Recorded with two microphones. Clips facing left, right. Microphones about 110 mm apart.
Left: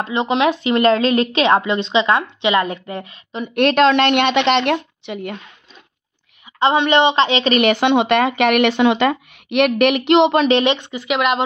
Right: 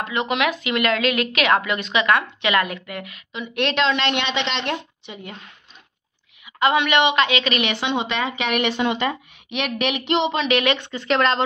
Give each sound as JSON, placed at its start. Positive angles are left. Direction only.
{"t": 0.0, "sound": "a woman's voice", "side_deg": 25}
{"t": 3.3, "sound": "speech", "side_deg": 45}
{"t": 6.6, "sound": "a woman's voice", "side_deg": 30}
{"t": 7.9, "sound": "speech", "side_deg": 65}
{"t": 10.5, "sound": "speech", "side_deg": 25}